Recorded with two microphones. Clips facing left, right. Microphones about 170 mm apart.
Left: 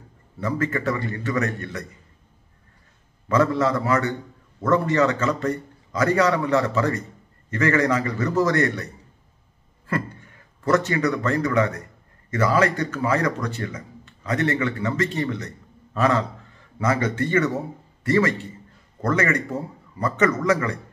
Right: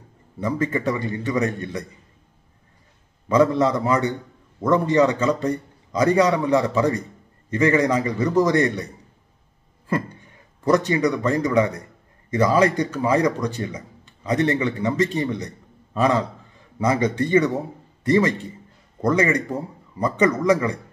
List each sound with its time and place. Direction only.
0.4 s a man's voice: 15° right (ahead or behind)
3.3 s a man's voice: 15° right (ahead or behind)
10.6 s a man's voice: 15° right (ahead or behind)